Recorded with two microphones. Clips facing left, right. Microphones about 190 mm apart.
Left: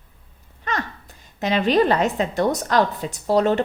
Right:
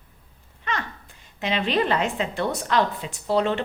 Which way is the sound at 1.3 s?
40° left (ahead or behind).